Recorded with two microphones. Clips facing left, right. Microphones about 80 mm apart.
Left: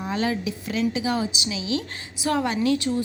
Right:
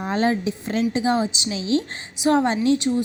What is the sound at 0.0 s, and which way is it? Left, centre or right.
A woman's voice, right.